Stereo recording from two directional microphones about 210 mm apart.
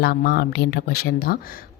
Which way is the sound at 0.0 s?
50° left (ahead or behind).